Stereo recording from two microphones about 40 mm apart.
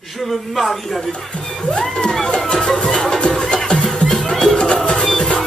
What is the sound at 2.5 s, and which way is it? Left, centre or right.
Music, centre.